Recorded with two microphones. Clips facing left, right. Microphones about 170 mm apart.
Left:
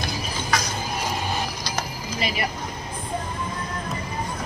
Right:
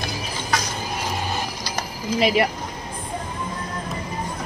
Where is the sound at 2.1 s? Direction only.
85° right.